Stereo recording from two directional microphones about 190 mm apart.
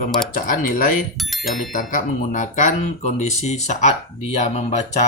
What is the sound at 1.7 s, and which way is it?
Speech, 40° left (ahead or behind).